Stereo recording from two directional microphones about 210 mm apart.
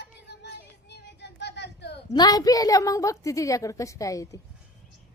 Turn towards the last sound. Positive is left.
turn(degrees=15)  # may be behind; listen again after turning